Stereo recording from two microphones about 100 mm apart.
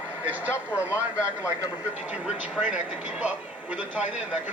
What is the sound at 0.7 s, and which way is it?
Speech, 30° left (ahead or behind).